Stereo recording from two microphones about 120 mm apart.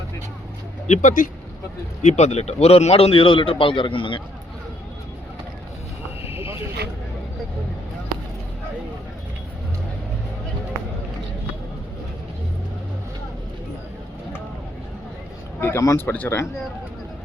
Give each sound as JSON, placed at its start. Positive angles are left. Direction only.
{"t": 0.9, "sound": "speech", "side_deg": 90}
{"t": 2.0, "sound": "a man's voice", "side_deg": 70}
{"t": 15.6, "sound": "speech", "side_deg": 25}